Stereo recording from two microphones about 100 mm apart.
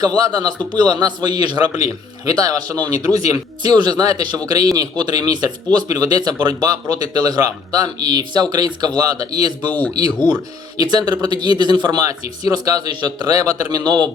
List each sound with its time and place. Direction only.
0.0 s a man's voice: 40° right (ahead or behind)